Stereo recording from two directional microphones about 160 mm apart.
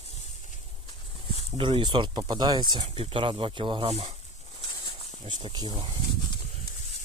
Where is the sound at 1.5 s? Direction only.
35° right (ahead or behind).